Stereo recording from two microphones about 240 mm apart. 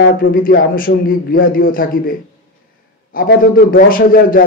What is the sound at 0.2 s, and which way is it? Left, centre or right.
A man's voice, left.